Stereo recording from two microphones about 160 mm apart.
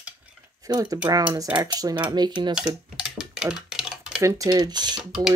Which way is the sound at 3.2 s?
5° right (ahead or behind).